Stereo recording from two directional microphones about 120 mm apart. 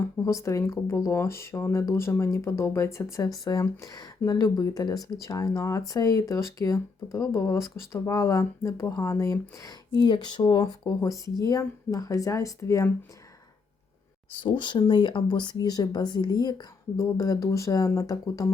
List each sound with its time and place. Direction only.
0.3 s speech: 25° left (ahead or behind)
14.4 s speech: 40° left (ahead or behind)